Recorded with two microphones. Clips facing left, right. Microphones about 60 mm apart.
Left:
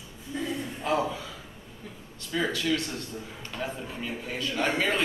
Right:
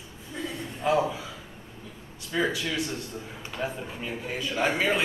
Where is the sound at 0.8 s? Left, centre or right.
Centre.